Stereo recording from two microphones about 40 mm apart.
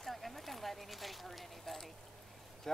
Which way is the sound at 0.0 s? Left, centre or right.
Centre.